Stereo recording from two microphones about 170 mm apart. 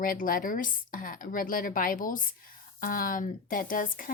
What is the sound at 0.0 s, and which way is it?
A woman's voice, 55° left (ahead or behind).